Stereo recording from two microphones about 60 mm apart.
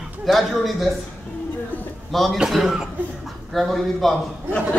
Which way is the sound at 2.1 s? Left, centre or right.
Centre.